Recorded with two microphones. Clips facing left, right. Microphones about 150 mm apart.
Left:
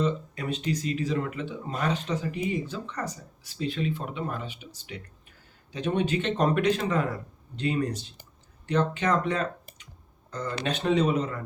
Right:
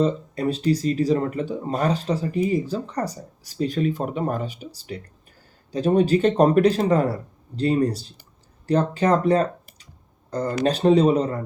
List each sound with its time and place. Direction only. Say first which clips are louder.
0.0 s speech: right 7 dB; 35° right (ahead or behind)